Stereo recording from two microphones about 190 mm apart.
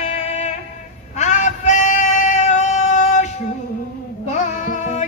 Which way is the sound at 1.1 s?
40° left (ahead or behind).